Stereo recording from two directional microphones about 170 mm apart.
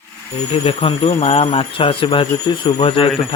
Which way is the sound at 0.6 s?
35° left (ahead or behind).